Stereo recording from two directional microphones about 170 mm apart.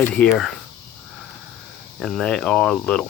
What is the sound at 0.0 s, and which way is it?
Speech, 5° left (ahead or behind).